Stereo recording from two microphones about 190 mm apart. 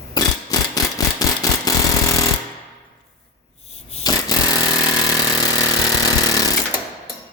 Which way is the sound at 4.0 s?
20° left (ahead or behind).